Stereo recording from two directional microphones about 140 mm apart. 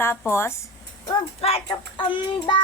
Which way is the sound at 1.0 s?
45° left (ahead or behind).